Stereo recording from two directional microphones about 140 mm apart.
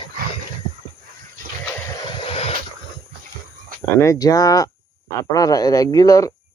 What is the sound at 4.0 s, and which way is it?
Speech, 25° left (ahead or behind).